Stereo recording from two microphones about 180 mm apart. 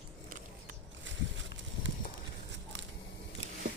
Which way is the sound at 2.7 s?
90° right.